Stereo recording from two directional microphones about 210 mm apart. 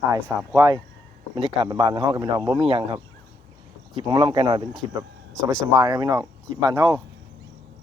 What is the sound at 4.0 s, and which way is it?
Speech, 20° right (ahead or behind).